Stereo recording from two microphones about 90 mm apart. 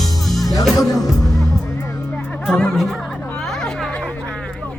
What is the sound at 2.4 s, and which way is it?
Speech, 10° left (ahead or behind).